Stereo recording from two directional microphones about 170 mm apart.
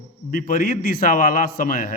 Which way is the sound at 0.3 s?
55° left (ahead or behind).